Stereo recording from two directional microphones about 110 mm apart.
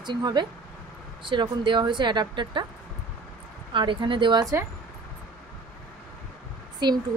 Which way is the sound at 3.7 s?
50° right (ahead or behind).